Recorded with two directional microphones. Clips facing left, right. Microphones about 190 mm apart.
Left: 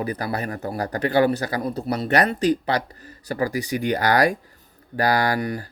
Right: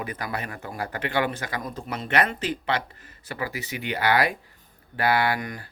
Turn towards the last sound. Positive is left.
turn(degrees=35)  # may be behind; listen again after turning